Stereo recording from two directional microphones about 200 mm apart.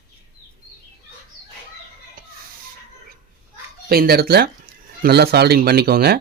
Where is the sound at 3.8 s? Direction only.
50° right (ahead or behind).